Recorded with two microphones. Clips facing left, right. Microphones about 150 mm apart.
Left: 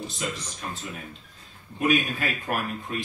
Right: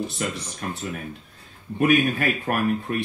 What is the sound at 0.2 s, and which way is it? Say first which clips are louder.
Speech: right 2 dB; 50° right (ahead or behind).